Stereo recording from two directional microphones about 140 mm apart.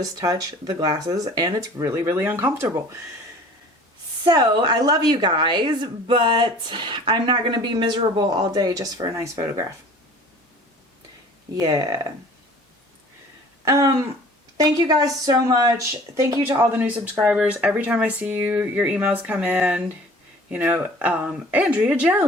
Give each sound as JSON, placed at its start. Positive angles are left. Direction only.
{"t": 0.0, "sound": "speech", "side_deg": -25}
{"t": 4.2, "sound": "a woman's voice", "side_deg": -30}
{"t": 11.5, "sound": "speech", "side_deg": -25}
{"t": 13.7, "sound": "speech", "side_deg": -20}